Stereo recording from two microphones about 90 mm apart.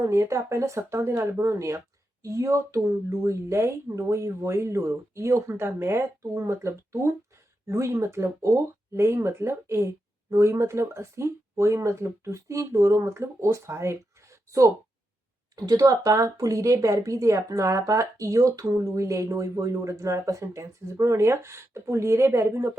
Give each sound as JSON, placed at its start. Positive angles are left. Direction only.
{"t": 0.0, "sound": "speech", "side_deg": -30}
{"t": 15.5, "sound": "speech", "side_deg": -45}